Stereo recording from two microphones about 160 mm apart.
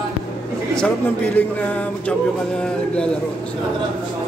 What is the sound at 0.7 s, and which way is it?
A man's voice, 10° left (ahead or behind).